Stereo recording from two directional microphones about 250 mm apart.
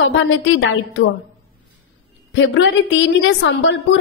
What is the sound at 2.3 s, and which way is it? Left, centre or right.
Speech, left.